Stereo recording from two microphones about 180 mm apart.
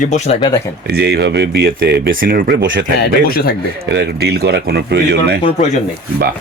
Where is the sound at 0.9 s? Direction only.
65° right (ahead or behind).